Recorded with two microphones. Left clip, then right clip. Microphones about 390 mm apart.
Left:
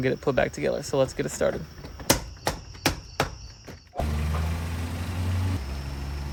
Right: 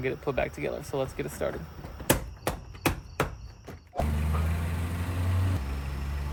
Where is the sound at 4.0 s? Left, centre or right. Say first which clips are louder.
Even; centre.